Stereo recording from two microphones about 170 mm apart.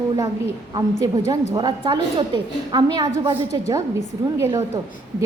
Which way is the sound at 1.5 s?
25° right (ahead or behind).